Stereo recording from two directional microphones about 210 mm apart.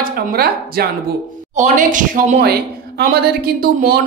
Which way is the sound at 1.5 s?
35° right (ahead or behind).